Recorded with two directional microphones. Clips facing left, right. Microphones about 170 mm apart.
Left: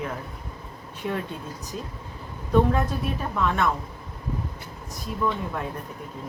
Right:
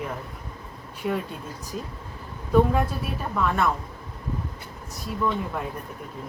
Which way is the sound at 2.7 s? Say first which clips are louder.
Even; 5° right (ahead or behind).